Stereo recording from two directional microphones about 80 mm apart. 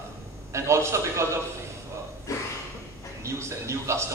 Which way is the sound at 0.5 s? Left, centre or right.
Right.